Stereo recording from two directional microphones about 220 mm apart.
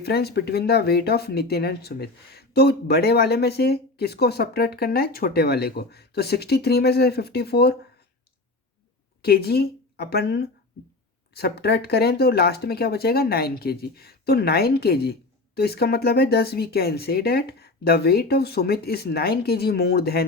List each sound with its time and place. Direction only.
0.0 s speech: 45° left (ahead or behind)
9.2 s speech: 45° left (ahead or behind)